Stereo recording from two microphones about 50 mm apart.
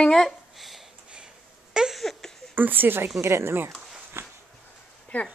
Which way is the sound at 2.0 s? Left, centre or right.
Centre.